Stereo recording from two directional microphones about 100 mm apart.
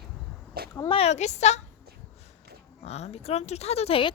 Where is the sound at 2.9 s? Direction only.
90° left; by 4.1 s 65° left (ahead or behind).